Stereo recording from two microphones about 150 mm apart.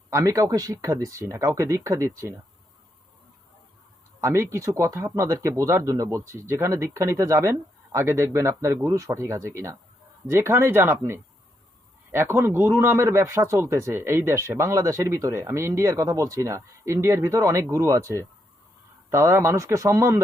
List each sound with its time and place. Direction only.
0.1 s a man's voice: 20° right (ahead or behind)
4.2 s a man's voice: 20° right (ahead or behind)